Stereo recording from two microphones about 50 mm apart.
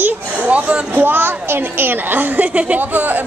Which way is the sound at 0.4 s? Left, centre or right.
Right.